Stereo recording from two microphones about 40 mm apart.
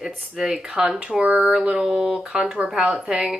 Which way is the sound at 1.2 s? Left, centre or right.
Right.